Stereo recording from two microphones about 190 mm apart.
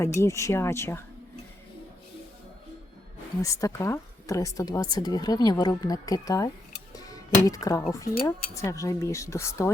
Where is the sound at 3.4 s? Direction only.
15° left (ahead or behind).